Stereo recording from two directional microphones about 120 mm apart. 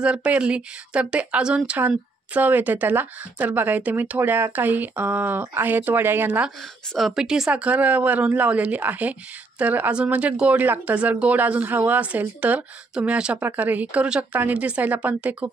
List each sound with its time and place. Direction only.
0.0 s speech: 10° right (ahead or behind)
6.9 s speech: centre (ahead or behind)